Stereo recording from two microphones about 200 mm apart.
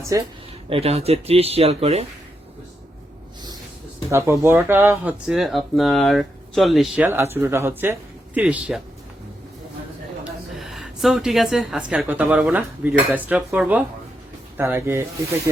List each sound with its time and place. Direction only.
0.0 s speech: 15° right (ahead or behind)
0.7 s speech: 30° right (ahead or behind)
4.1 s speech: 15° right (ahead or behind)
10.6 s speech: centre (ahead or behind)